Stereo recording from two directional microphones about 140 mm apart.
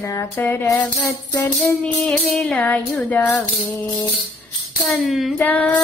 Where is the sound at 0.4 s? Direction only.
15° left (ahead or behind).